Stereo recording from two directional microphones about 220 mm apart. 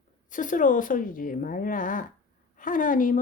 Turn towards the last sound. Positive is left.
turn(degrees=35)  # may be behind; listen again after turning